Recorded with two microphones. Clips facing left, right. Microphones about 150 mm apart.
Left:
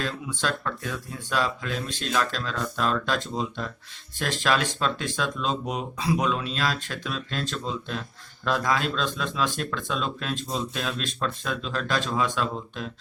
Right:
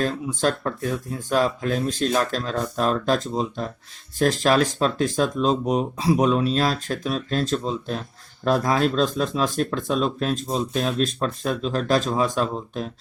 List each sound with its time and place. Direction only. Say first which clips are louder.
0.0 s speech: right 7 dB; 45° right (ahead or behind)